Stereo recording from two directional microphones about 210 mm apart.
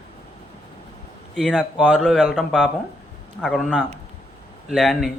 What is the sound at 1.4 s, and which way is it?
A man's voice, centre (ahead or behind).